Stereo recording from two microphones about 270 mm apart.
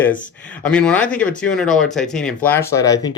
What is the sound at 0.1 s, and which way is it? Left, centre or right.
Speech, left.